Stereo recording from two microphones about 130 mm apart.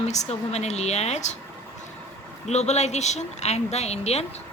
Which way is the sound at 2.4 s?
60° left (ahead or behind).